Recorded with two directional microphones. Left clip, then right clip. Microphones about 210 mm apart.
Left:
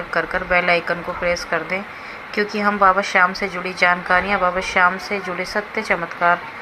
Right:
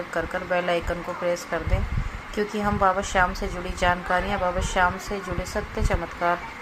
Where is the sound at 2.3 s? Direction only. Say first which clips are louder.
Left 7 dB; 10° left (ahead or behind).